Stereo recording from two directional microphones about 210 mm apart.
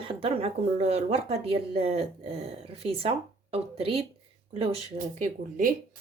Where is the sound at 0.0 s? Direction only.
25° right (ahead or behind).